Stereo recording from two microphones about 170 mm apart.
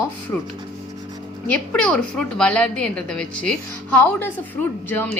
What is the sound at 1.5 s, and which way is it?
A woman's voice, 5° left (ahead or behind).